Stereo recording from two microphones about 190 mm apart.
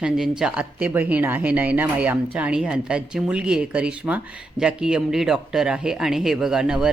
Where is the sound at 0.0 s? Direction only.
5° right (ahead or behind).